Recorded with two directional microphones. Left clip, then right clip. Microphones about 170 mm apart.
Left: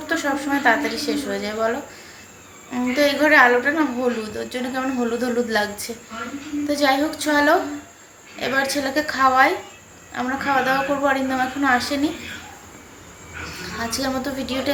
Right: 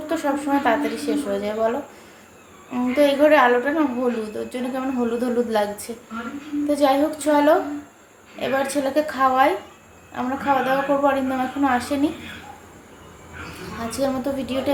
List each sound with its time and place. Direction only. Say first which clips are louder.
0.1 s a woman's voice: even; 10° right (ahead or behind)
2.7 s a woman's voice: right 1 dB; 10° right (ahead or behind)
13.7 s a woman's voice: right 1 dB; 10° right (ahead or behind)